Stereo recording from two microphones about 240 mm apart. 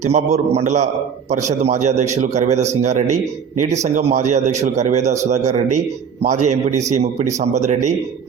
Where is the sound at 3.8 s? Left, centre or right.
Right.